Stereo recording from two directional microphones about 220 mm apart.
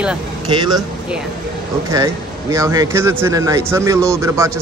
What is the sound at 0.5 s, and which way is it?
Speech, 20° right (ahead or behind).